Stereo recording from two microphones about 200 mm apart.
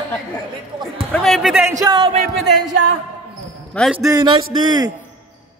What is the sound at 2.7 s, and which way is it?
Speech, 60° right (ahead or behind).